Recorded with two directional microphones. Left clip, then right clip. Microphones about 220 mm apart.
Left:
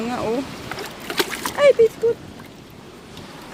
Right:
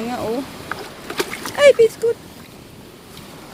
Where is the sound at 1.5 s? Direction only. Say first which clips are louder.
Right 3 dB; 15° right (ahead or behind).